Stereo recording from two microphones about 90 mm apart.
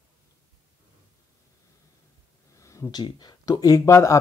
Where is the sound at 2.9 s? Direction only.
55° left (ahead or behind); by 4.2 s 35° left (ahead or behind).